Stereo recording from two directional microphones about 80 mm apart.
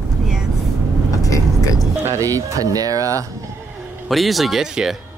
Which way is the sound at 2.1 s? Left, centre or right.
Right.